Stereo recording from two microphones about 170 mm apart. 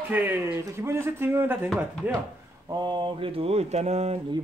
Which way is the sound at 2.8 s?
25° right (ahead or behind).